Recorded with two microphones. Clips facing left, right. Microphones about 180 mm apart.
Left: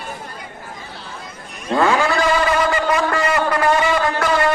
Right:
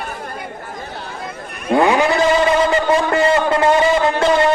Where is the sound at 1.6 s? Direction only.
15° right (ahead or behind).